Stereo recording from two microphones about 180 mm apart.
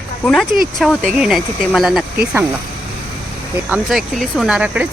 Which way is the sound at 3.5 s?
5° right (ahead or behind).